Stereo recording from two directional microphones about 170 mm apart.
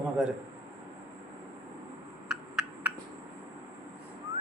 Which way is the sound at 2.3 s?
5° right (ahead or behind).